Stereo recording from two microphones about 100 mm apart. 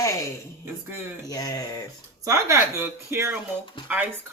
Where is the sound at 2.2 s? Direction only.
30° right (ahead or behind).